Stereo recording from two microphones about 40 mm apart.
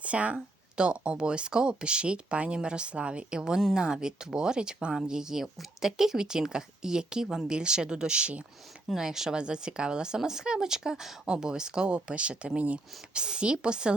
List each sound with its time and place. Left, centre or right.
0.0 s speech: right
9.0 s speech: centre; by 12.8 s right
13.1 s speech: right